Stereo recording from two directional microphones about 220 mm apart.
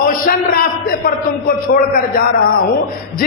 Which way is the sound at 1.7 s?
55° left (ahead or behind).